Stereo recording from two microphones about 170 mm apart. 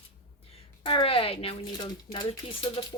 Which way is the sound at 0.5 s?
30° left (ahead or behind).